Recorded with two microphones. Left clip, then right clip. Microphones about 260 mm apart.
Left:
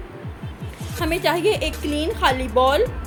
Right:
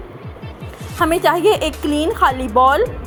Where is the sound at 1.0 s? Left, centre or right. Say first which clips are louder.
Right 6 dB; centre.